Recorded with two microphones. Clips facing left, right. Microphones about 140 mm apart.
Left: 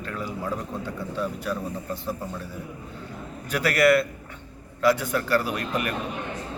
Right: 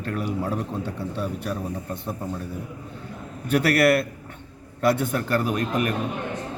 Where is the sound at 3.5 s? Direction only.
60° right (ahead or behind).